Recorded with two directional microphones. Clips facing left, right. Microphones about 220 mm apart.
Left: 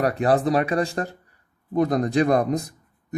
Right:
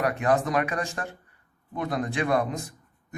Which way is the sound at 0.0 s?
35° left (ahead or behind).